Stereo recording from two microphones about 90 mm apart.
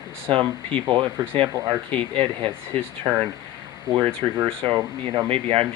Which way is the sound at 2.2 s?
70° right (ahead or behind).